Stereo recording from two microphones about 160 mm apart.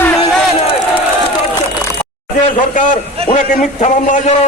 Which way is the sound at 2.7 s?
55° left (ahead or behind).